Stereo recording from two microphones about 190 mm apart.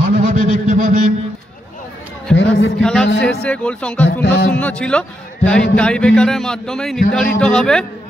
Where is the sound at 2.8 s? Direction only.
5° left (ahead or behind).